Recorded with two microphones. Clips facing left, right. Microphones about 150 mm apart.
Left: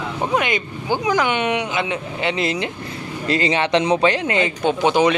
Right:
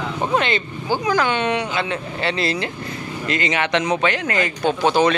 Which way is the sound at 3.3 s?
30° left (ahead or behind).